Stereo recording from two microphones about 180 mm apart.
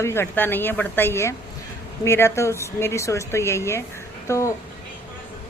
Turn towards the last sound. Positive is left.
turn(degrees=15)  # may be behind; listen again after turning